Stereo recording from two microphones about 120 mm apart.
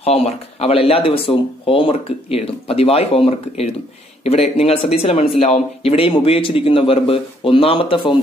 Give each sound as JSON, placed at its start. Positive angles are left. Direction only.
{"t": 0.0, "sound": "speech", "side_deg": 55}